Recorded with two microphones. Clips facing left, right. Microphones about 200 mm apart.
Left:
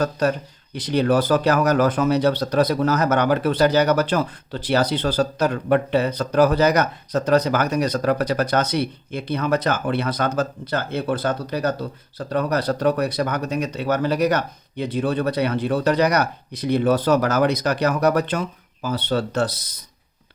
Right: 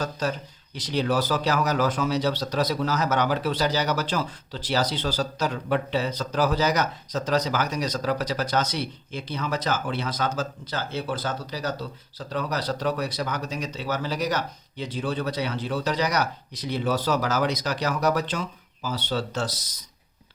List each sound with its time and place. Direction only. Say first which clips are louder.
0.0 s speech: left 7 dB; 60° left (ahead or behind)